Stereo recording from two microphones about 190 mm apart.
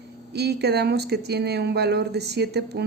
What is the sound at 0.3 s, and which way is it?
Speech, 60° right (ahead or behind).